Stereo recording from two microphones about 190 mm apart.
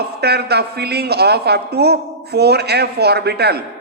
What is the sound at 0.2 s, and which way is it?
A man's voice, 60° right (ahead or behind).